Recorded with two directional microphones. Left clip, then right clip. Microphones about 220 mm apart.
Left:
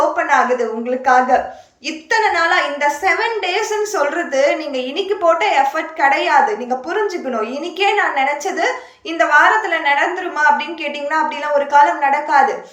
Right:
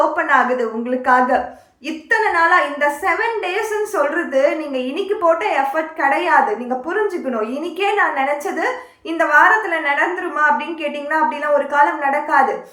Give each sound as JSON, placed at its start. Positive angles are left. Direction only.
{"t": 0.2, "sound": "a woman's voice", "side_deg": -10}